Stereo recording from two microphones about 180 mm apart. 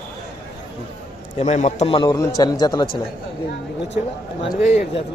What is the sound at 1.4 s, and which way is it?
A man's voice, 40° left (ahead or behind).